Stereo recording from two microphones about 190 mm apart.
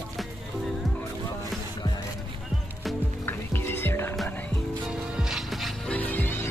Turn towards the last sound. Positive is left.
turn(degrees=10)  # may be behind; listen again after turning